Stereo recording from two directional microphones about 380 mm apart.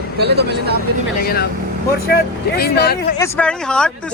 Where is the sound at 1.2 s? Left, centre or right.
Left.